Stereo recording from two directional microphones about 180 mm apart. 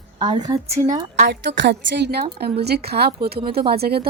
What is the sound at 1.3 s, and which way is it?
A woman's voice, 75° right (ahead or behind).